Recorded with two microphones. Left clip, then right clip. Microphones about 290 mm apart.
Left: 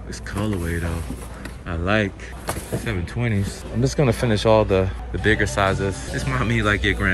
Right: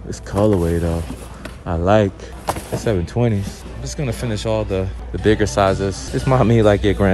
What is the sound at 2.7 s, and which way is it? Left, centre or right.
Speech, centre.